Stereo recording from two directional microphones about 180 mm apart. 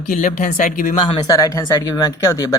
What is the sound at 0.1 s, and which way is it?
Speech, 45° left (ahead or behind).